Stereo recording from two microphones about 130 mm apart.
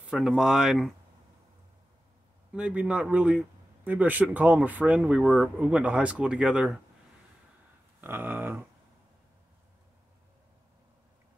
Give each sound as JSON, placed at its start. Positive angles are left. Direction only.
{"t": 0.0, "sound": "speech", "side_deg": -5}
{"t": 2.5, "sound": "speech", "side_deg": -10}
{"t": 8.0, "sound": "speech", "side_deg": -15}